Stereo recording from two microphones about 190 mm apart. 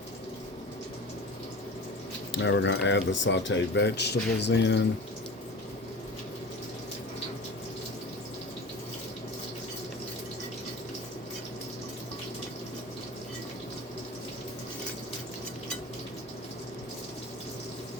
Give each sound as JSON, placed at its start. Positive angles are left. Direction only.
{"t": 2.3, "sound": "speech", "side_deg": 70}